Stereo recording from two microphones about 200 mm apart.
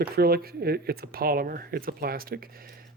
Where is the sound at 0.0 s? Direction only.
50° right (ahead or behind).